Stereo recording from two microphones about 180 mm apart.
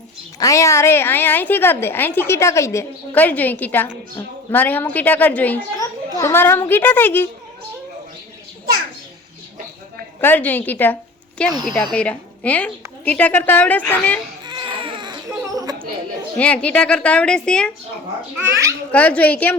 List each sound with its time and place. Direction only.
0.3 s a woman's voice: 20° left (ahead or behind)
10.2 s a woman's voice: 10° left (ahead or behind)
14.4 s crying: 25° right (ahead or behind)
16.4 s a woman's voice: 5° left (ahead or behind)
18.3 s a child's voice: 15° right (ahead or behind)
18.9 s a woman's voice: 10° left (ahead or behind)